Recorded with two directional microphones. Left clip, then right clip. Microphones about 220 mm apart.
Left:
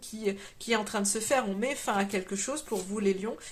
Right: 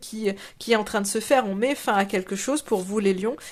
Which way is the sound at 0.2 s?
35° right (ahead or behind).